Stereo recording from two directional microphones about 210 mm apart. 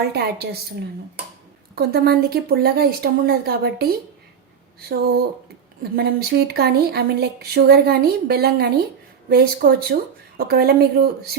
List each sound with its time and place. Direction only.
0.1 s speech: 50° right (ahead or behind)
1.7 s speech: 45° right (ahead or behind)